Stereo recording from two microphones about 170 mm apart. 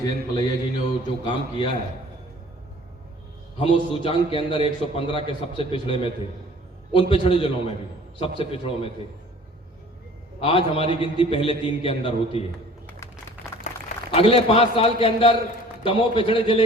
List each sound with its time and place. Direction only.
0.0 s mantra: 25° left (ahead or behind)
3.6 s a man's voice: 30° left (ahead or behind)
10.4 s a man's voice: 30° left (ahead or behind)
14.1 s a man's voice: 35° left (ahead or behind)